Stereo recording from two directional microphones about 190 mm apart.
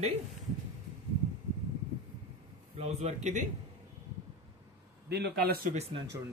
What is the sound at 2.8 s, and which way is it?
Speech, 35° right (ahead or behind).